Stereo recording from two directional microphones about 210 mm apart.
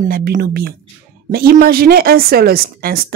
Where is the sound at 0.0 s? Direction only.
40° right (ahead or behind).